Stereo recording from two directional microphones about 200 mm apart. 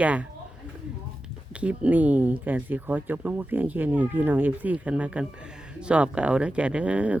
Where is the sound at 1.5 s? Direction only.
5° right (ahead or behind).